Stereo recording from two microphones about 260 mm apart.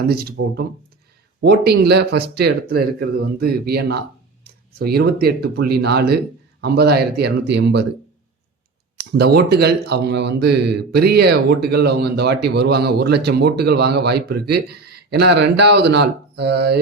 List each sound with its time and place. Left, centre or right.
0.1 s speech: right
9.0 s speech: right